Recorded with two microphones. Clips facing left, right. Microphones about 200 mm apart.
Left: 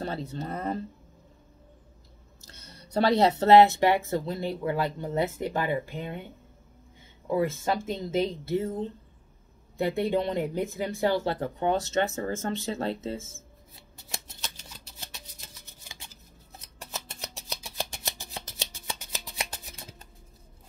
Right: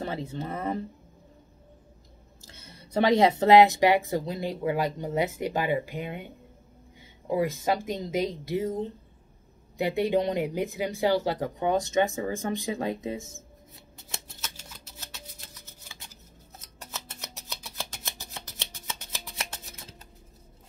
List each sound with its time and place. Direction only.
0.0 s speech: 15° right (ahead or behind)
2.9 s speech: 15° right (ahead or behind)
7.2 s speech: 15° right (ahead or behind)
9.8 s speech: 15° right (ahead or behind)
15.1 s a sound: 15° left (ahead or behind)
18.9 s shuffling cards: 15° left (ahead or behind)